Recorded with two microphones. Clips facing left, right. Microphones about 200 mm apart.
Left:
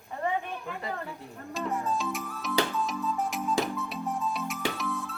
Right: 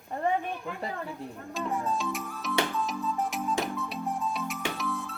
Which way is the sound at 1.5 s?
Centre (ahead or behind).